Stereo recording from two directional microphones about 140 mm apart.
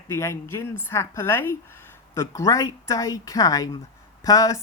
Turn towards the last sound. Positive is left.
turn(degrees=25)  # may be behind; listen again after turning